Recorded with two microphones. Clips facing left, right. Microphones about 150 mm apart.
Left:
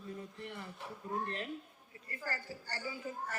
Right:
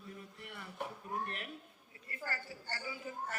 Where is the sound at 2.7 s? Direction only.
30° left (ahead or behind).